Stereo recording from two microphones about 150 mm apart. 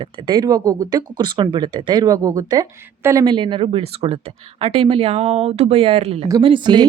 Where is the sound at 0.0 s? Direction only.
30° right (ahead or behind).